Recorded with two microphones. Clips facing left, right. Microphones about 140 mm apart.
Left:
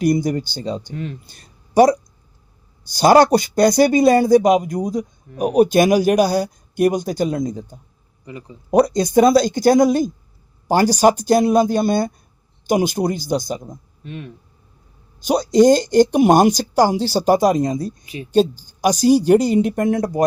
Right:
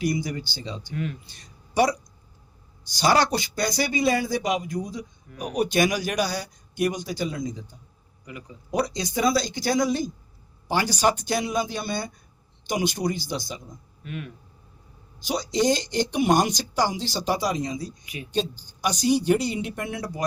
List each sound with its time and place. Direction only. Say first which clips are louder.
0.0 s speech: left 9 dB; 50° left (ahead or behind)
0.9 s speech: left 2 dB; 30° left (ahead or behind)
1.3 s a sound: left 11 dB; 45° left (ahead or behind)
3.0 s speech: left 10 dB; 45° left (ahead or behind)
8.2 s speech: left 5 dB; 30° left (ahead or behind)
8.7 s speech: left 12 dB; 50° left (ahead or behind)
14.0 s speech: left 2 dB; 25° left (ahead or behind)
15.2 s speech: left 11 dB; 50° left (ahead or behind)
18.0 s speech: left 6 dB; 30° left (ahead or behind)
18.3 s speech: left 12 dB; 45° left (ahead or behind)